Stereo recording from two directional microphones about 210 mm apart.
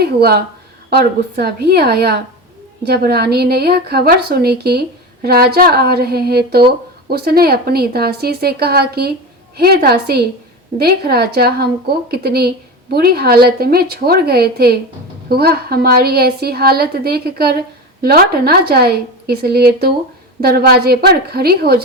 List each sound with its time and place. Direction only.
0.0 s a woman's voice: 50° right (ahead or behind)